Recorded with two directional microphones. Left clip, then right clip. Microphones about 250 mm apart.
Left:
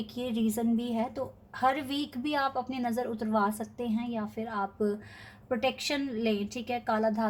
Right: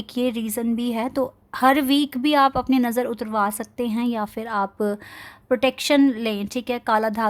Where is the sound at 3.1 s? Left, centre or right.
Right.